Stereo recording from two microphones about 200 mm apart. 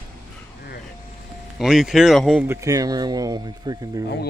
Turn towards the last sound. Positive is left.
turn(degrees=-20)  # may be behind; listen again after turning